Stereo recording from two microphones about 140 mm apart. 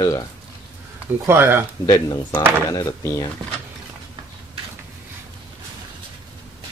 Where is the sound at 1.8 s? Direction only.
25° left (ahead or behind).